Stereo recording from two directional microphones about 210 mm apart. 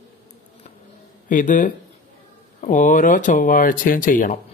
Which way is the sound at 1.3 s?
40° left (ahead or behind).